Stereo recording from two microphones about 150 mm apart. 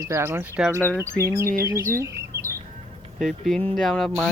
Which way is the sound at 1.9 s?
20° right (ahead or behind).